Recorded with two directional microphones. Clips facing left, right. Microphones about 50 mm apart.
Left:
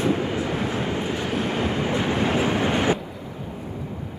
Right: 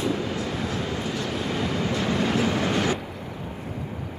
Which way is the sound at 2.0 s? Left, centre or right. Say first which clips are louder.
Left 1 dB; left.